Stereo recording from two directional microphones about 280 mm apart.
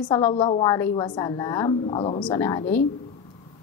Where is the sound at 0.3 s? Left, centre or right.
Centre.